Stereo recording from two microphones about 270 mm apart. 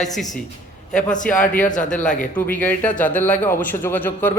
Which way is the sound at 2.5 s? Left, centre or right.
Centre.